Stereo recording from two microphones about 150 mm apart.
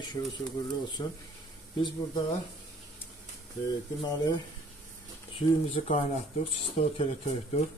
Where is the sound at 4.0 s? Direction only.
25° left (ahead or behind).